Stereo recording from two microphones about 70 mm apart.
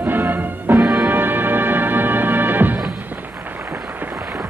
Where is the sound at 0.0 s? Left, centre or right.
Right.